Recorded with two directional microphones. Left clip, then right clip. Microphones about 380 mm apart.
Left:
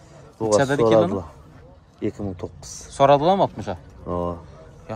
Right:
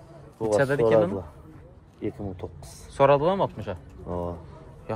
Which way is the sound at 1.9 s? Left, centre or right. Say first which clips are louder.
Left 5 dB; left.